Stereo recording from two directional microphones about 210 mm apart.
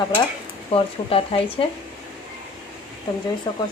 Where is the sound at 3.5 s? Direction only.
20° left (ahead or behind).